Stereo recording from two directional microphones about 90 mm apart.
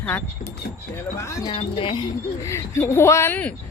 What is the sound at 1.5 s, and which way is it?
Speech, 70° left (ahead or behind).